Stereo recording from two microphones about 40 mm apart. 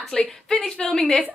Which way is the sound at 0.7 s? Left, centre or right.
Left.